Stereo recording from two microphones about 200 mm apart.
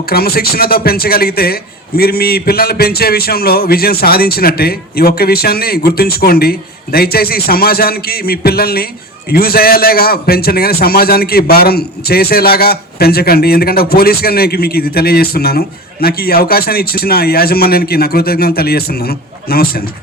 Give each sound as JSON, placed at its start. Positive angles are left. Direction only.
{"t": 0.1, "sound": "a man's voice", "side_deg": 50}